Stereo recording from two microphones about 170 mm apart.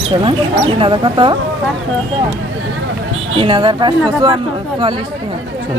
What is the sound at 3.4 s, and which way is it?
Speech, 30° right (ahead or behind).